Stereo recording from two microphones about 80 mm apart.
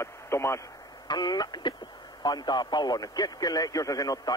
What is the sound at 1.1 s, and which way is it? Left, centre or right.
A man's voice, left.